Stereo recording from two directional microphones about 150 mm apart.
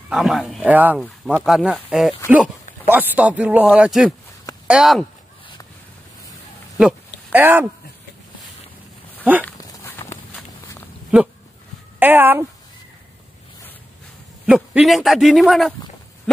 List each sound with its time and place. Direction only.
0.1 s speech: 5° right (ahead or behind)
1.0 s speech: centre (ahead or behind)
7.3 s speech: 15° right (ahead or behind)
9.6 s dog: 25° left (ahead or behind)
12.0 s speech: 15° right (ahead or behind)
14.4 s speech: 5° right (ahead or behind)